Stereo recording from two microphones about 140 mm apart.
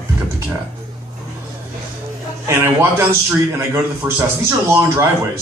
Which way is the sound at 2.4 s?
20° right (ahead or behind).